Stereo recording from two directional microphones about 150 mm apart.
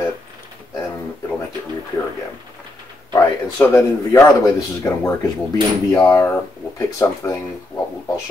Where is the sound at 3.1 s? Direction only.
20° left (ahead or behind).